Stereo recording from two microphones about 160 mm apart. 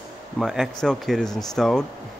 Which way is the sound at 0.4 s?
Centre (ahead or behind).